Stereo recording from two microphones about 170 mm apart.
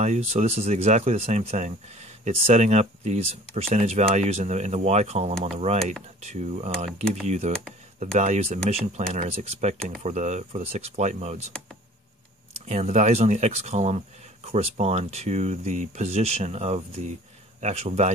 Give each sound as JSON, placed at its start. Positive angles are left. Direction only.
{"t": 0.0, "sound": "speech", "side_deg": -40}
{"t": 12.6, "sound": "speech", "side_deg": -40}